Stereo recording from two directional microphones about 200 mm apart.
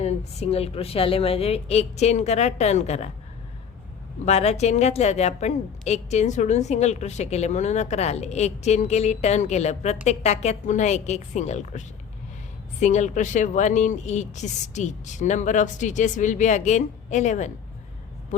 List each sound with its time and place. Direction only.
0.0 s a woman's voice: 30° left (ahead or behind)
4.3 s a woman's voice: 35° left (ahead or behind)